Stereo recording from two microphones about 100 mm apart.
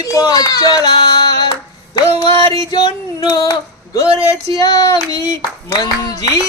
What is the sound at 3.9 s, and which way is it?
Speech, 35° left (ahead or behind).